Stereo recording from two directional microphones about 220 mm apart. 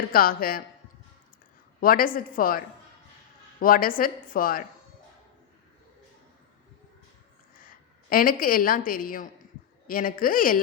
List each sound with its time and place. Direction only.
0.1 s a woman's voice: 40° left (ahead or behind)
1.8 s a woman's voice: 40° left (ahead or behind)
3.6 s a woman's voice: 40° left (ahead or behind)
8.1 s a woman's voice: 40° left (ahead or behind)